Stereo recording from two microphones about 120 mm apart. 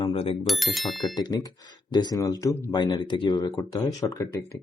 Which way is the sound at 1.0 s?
35° left (ahead or behind).